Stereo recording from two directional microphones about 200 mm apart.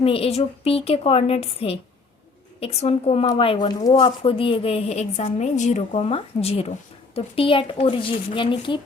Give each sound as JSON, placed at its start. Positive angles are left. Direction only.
{"t": 0.0, "sound": "a woman's voice", "side_deg": 30}